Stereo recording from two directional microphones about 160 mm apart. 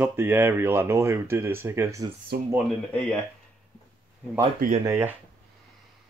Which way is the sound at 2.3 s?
80° right.